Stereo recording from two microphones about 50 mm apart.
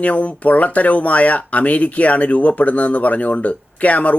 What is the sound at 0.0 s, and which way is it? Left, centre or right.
Speech, left.